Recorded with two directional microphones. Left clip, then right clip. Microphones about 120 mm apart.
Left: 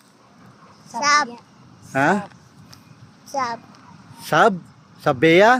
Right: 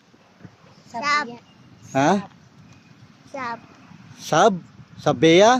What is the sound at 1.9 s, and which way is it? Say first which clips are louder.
Speech: left 1 dB; 35° right (ahead or behind).